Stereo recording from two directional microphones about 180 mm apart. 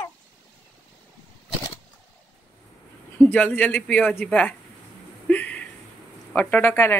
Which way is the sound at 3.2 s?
10° left (ahead or behind).